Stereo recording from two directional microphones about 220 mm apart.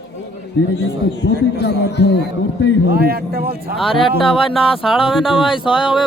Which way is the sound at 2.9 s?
45° right (ahead or behind).